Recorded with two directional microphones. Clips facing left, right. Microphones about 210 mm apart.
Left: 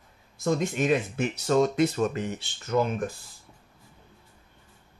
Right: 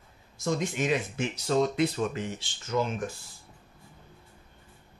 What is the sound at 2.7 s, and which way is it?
Speech, 60° left (ahead or behind).